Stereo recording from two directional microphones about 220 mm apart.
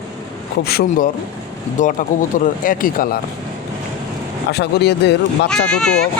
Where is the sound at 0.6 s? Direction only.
45° left (ahead or behind).